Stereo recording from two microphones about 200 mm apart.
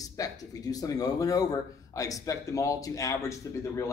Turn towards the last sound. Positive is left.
turn(degrees=15)  # may be behind; listen again after turning